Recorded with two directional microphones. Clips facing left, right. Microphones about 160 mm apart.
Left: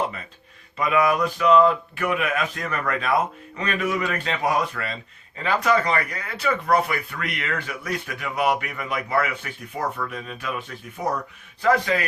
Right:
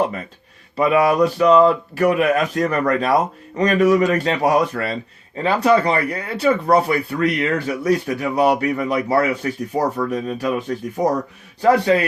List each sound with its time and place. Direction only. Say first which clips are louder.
0.8 s speech: right 6 dB; 30° right (ahead or behind)